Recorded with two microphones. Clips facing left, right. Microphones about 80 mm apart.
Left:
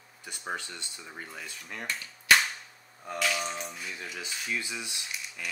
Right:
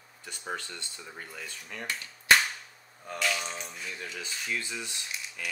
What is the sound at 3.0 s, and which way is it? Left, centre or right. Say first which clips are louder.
Speech: left 1 dB; centre.